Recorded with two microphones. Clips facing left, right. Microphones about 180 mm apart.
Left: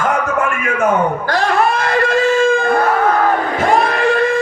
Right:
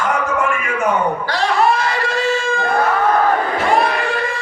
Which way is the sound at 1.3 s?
50° left (ahead or behind).